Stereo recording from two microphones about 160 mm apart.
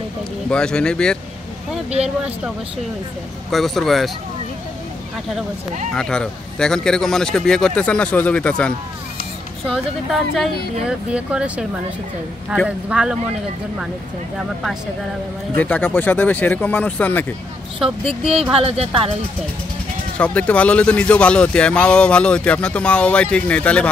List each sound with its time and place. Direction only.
0.5 s a man's voice: 5° left (ahead or behind)
3.4 s a man's voice: centre (ahead or behind)
5.9 s a man's voice: 5° left (ahead or behind)
10.3 s a man's voice: 5° right (ahead or behind)
12.6 s a man's voice: 5° right (ahead or behind)
15.5 s speech: 10° left (ahead or behind)
18.5 s speech: 40° right (ahead or behind)
20.2 s speech: 10° left (ahead or behind)